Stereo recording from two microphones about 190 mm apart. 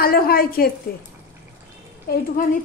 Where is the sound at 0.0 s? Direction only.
50° left (ahead or behind).